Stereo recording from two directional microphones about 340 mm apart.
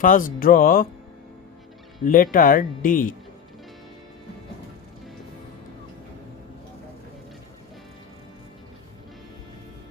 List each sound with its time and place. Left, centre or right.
0.0 s speech: left
2.0 s speech: left